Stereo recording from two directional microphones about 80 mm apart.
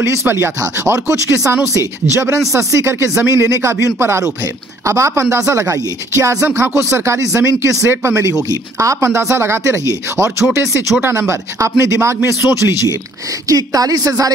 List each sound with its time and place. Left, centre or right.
0.0 s speech: right
4.8 s speech: right
13.5 s a woman's voice: right